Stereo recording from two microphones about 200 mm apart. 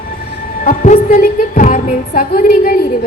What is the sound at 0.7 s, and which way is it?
A woman's voice, 35° left (ahead or behind).